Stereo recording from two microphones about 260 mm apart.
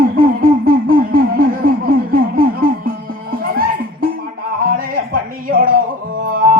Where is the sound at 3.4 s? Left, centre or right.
Right.